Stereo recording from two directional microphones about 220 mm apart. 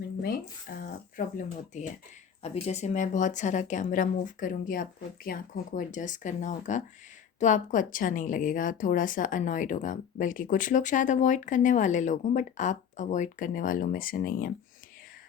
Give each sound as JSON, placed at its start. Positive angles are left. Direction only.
{"t": 0.2, "sound": "a woman's voice", "side_deg": 40}